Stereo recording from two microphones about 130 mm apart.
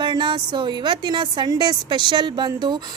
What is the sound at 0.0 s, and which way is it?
A woman's voice, 35° right (ahead or behind).